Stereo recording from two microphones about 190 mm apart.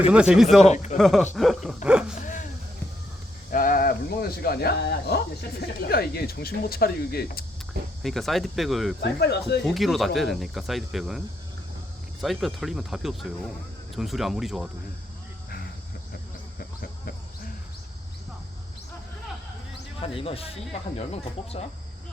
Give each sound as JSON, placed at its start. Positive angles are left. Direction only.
{"t": 0.1, "sound": "speech", "side_deg": -5}
{"t": 0.7, "sound": "speech", "side_deg": 40}
{"t": 0.9, "sound": "speech", "side_deg": 0}
{"t": 2.1, "sound": "a sound", "side_deg": 40}
{"t": 3.5, "sound": "speech", "side_deg": 45}
{"t": 8.0, "sound": "speech", "side_deg": 0}
{"t": 9.0, "sound": "speech", "side_deg": 60}
{"t": 9.6, "sound": "speech", "side_deg": 0}
{"t": 12.2, "sound": "speech", "side_deg": 0}
{"t": 20.0, "sound": "speech", "side_deg": 30}